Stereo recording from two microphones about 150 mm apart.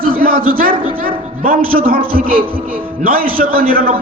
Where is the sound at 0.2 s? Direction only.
75° right (ahead or behind).